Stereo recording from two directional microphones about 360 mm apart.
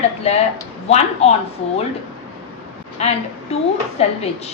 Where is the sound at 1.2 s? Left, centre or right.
Centre.